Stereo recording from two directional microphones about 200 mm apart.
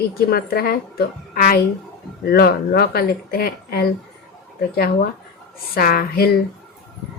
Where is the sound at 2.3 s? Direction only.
50° left (ahead or behind).